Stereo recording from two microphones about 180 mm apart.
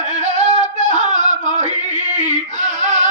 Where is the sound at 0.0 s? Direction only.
40° right (ahead or behind).